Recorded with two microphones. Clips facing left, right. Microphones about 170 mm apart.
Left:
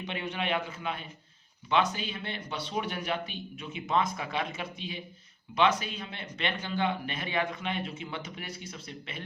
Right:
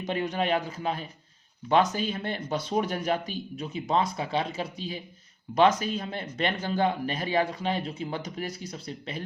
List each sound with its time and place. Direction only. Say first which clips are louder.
0.0 s speech: right 6 dB; 40° right (ahead or behind)